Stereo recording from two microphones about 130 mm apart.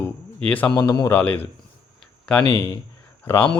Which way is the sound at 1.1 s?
15° left (ahead or behind).